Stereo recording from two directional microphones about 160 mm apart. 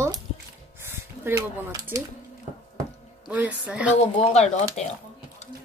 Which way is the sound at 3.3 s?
10° right (ahead or behind).